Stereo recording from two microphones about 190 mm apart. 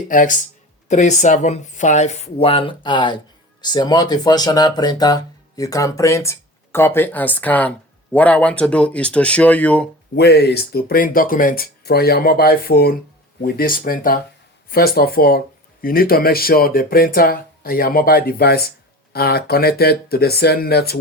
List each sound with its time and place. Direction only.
0.1 s speech: 45° left (ahead or behind); by 9.9 s 5° left (ahead or behind)
10.2 s speech: 60° left (ahead or behind)